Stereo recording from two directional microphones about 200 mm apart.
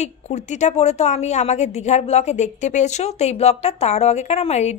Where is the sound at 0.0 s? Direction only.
35° left (ahead or behind).